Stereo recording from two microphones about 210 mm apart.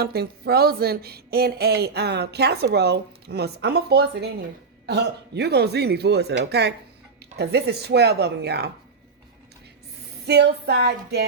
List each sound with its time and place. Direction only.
0.0 s speech: 50° right (ahead or behind)
10.2 s speech: 50° right (ahead or behind)